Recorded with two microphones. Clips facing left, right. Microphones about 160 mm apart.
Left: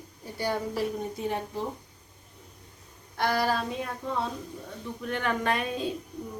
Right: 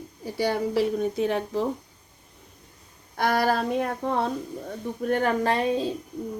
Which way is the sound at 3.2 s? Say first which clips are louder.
Right 4 dB; 55° right (ahead or behind).